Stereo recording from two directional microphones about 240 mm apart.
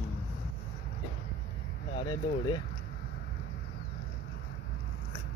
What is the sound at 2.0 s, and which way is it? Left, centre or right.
Speech, centre.